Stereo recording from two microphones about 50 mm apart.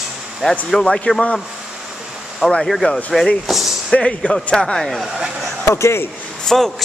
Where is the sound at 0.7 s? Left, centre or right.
Centre.